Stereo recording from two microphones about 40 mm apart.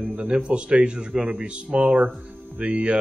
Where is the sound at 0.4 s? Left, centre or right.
Right.